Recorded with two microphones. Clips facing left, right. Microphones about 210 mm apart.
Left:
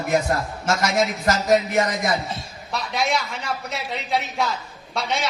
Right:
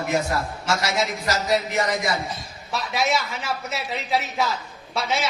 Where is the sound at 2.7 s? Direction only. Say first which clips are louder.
Even; centre (ahead or behind).